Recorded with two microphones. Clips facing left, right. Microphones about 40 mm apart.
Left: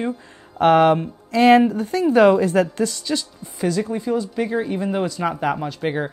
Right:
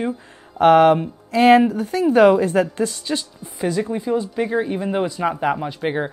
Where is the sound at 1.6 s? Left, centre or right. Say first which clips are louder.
Even; centre.